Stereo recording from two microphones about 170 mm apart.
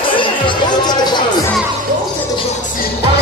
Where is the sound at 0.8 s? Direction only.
25° left (ahead or behind).